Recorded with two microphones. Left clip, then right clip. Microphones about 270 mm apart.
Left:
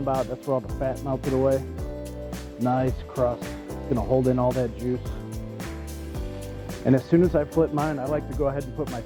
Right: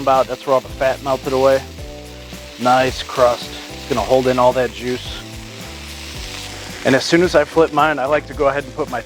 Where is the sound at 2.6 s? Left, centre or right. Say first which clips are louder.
Right 11 dB; centre.